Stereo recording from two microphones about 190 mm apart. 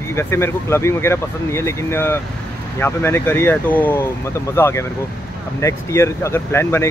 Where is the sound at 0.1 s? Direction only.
15° left (ahead or behind).